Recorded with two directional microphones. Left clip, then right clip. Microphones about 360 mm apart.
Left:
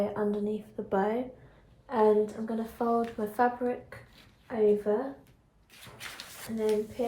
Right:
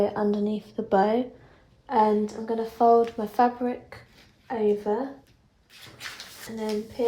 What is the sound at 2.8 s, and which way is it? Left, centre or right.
Speech, right.